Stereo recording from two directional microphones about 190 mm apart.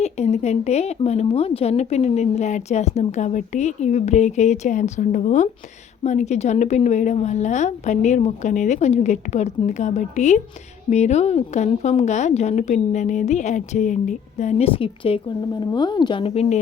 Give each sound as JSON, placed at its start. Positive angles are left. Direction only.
{"t": 0.0, "sound": "a woman's voice", "side_deg": 35}